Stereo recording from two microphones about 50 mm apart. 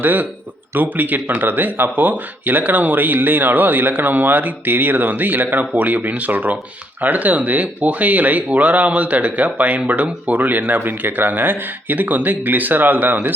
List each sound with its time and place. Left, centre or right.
0.0 s speech: right